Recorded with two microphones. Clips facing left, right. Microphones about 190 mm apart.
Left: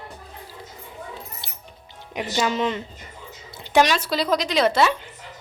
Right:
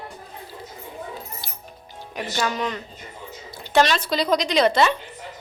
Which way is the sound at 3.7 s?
10° left (ahead or behind).